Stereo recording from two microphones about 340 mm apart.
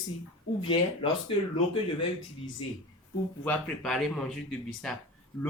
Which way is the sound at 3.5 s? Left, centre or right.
Centre.